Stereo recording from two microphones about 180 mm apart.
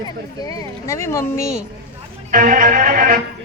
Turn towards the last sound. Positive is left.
turn(degrees=-50)  # may be behind; listen again after turning